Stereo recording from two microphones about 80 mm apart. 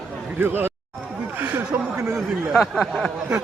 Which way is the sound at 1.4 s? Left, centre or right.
Right.